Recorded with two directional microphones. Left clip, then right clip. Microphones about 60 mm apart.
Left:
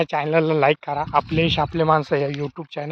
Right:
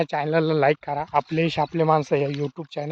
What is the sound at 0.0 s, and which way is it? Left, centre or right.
Speech, right.